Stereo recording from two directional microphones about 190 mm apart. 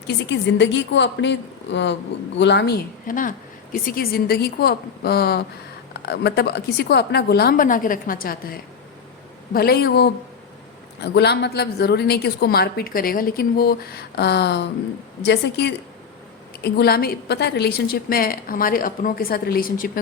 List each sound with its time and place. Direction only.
0.1 s a woman's voice: 70° left (ahead or behind); by 19.9 s 50° left (ahead or behind)